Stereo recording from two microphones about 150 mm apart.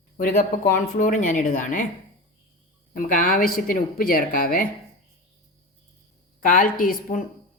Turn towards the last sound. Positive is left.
turn(degrees=70)  # may be behind; listen again after turning